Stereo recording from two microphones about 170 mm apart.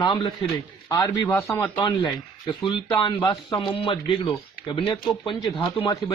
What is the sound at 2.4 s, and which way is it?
Speech, 25° left (ahead or behind).